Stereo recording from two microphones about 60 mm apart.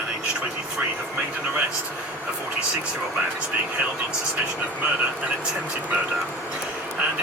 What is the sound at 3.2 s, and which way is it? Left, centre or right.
Speech, right.